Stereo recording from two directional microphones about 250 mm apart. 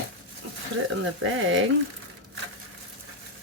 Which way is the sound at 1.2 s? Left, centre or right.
Right.